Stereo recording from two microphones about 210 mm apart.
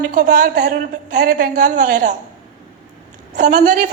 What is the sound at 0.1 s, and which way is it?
A woman's voice, 35° right (ahead or behind).